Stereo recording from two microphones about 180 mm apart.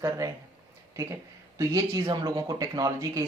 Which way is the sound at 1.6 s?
20° right (ahead or behind).